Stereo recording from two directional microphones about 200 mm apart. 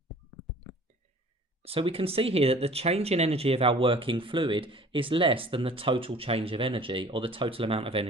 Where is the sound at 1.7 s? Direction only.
30° right (ahead or behind).